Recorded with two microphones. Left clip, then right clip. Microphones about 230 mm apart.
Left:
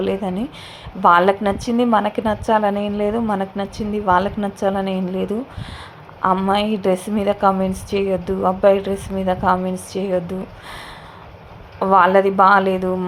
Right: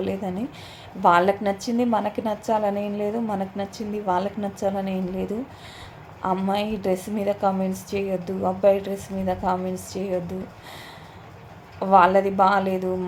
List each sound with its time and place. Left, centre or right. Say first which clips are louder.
0.0 s a woman's voice: left 6 dB; centre
11.8 s a woman's voice: left 3 dB; centre